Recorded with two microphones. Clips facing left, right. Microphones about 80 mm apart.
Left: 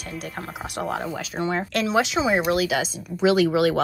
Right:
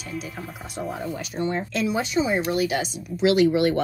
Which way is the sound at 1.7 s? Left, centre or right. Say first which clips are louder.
Left 3 dB; left.